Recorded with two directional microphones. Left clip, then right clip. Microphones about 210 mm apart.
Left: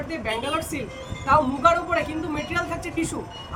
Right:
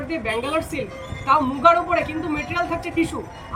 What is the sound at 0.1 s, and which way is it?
A woman's voice, 25° left (ahead or behind).